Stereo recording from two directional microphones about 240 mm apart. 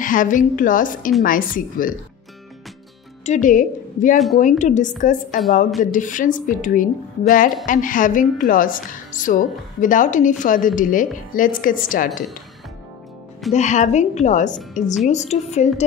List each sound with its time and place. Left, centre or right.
0.0 s a woman's voice: left
3.3 s a woman's voice: left
13.5 s a woman's voice: left